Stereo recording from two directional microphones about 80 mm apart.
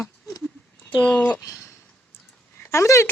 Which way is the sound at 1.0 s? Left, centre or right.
Centre.